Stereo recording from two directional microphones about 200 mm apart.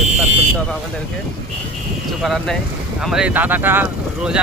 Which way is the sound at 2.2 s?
Centre (ahead or behind).